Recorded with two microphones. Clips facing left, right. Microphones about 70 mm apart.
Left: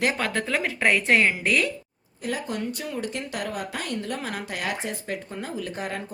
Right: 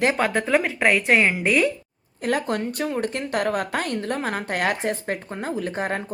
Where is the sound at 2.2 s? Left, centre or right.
Right.